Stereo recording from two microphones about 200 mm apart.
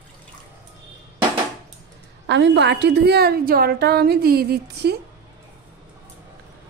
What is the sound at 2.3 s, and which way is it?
A woman's voice, 60° right (ahead or behind).